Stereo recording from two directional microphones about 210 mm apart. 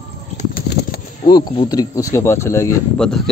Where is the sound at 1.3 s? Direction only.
20° left (ahead or behind).